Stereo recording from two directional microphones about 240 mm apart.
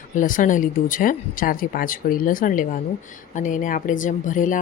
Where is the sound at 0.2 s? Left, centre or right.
Left.